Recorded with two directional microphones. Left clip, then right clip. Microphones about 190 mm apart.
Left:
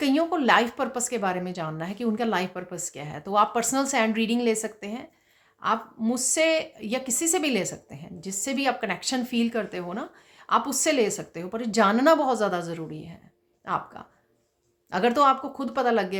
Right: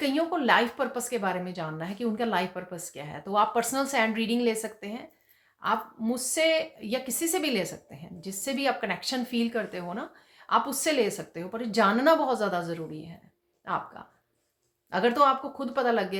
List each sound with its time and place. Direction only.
0.0 s a woman's voice: 40° left (ahead or behind)